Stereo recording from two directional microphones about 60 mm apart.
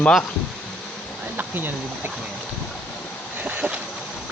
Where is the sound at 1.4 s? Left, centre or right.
Right.